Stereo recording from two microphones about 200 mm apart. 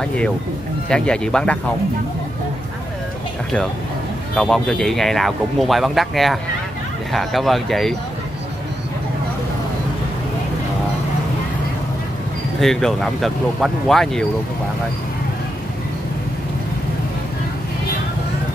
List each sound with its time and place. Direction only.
0.8 s speech: 5° left (ahead or behind)
4.4 s speech: centre (ahead or behind)
12.5 s speech: centre (ahead or behind)